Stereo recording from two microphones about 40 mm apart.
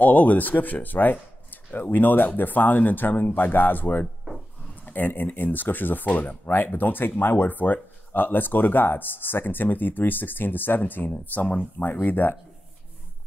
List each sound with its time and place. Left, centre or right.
0.0 s speech: left